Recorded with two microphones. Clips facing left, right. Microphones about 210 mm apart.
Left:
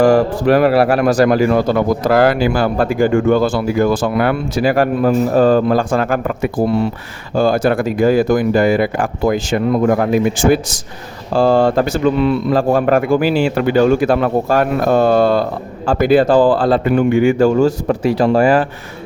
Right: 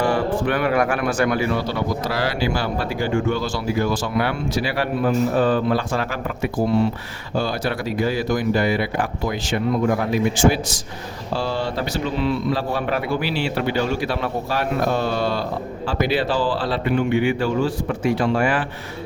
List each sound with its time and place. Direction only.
0.0 s a man's voice: 40° left (ahead or behind)